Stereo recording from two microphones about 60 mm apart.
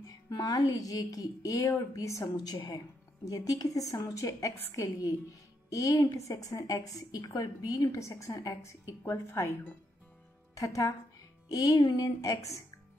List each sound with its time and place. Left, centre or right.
0.4 s a woman's voice: left
2.0 s a woman's voice: left
3.3 s a woman's voice: left
8.6 s a woman's voice: left
10.5 s a woman's voice: left
11.4 s a woman's voice: left